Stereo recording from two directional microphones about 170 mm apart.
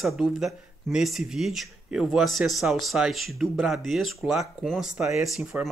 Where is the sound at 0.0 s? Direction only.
Centre (ahead or behind).